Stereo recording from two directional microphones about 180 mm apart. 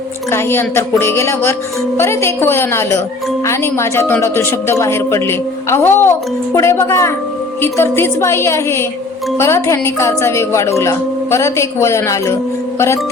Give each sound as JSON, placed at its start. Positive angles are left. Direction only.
{"t": 0.3, "sound": "speech", "side_deg": 15}